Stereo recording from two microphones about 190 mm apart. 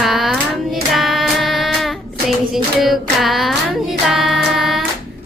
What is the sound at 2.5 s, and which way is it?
Music, centre (ahead or behind).